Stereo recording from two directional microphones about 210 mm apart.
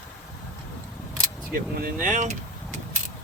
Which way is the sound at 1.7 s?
45° right (ahead or behind).